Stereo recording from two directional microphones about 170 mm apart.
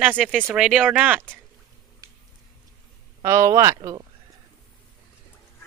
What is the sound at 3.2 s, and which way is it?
Speech, 15° right (ahead or behind).